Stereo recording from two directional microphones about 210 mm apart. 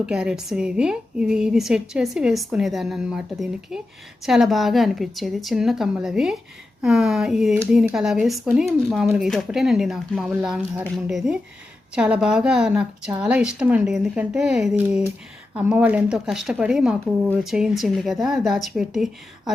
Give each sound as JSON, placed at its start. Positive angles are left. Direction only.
{"t": 0.0, "sound": "speech", "side_deg": -5}